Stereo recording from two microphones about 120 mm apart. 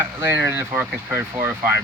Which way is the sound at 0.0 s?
20° right (ahead or behind).